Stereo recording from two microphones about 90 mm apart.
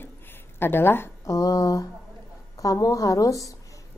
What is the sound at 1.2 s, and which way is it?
A woman's voice, 40° left (ahead or behind).